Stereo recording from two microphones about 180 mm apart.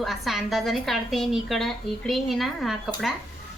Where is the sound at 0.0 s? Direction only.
Centre (ahead or behind).